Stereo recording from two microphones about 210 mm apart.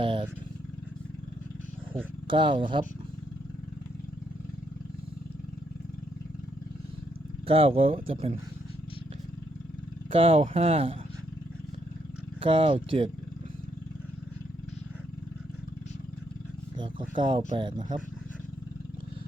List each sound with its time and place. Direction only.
0.0 s vehicle: 25° right (ahead or behind)
2.2 s speech: 25° right (ahead or behind)
7.4 s speech: 25° right (ahead or behind)
10.1 s speech: 25° right (ahead or behind)
12.4 s speech: 25° right (ahead or behind)
16.7 s a sound: 20° right (ahead or behind)